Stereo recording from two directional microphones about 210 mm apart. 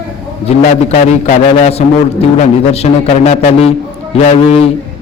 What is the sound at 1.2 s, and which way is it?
A man's voice, 30° left (ahead or behind).